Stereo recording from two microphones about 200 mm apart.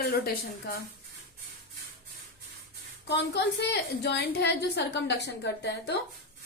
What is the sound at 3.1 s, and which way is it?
A woman's voice, 60° left (ahead or behind).